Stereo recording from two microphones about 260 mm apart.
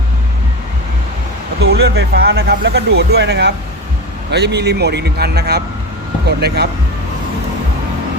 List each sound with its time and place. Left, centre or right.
1.6 s speech: right